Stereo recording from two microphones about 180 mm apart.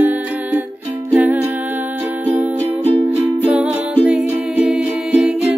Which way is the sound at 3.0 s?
5° right (ahead or behind).